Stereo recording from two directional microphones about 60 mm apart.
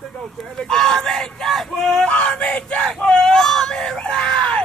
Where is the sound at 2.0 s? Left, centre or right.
Centre.